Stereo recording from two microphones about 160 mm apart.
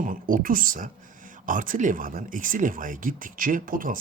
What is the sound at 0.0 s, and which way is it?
Speech, 60° right (ahead or behind).